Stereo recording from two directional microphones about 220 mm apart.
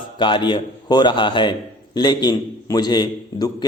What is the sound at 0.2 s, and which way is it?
A man's voice, 20° left (ahead or behind).